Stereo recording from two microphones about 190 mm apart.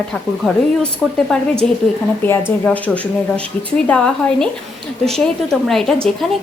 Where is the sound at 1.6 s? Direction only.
5° left (ahead or behind).